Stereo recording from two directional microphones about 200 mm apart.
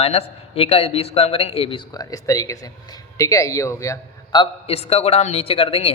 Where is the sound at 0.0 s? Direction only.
30° left (ahead or behind).